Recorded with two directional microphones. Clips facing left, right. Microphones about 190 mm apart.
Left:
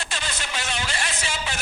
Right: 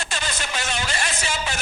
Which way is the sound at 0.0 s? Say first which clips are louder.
Right 3 dB; 45° right (ahead or behind).